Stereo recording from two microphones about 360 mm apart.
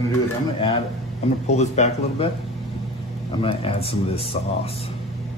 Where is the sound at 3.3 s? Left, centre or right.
Centre.